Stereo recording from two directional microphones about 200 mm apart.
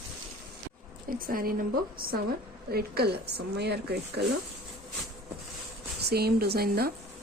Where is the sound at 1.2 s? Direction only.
45° right (ahead or behind).